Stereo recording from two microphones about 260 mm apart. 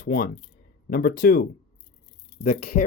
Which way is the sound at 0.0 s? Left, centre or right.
Left.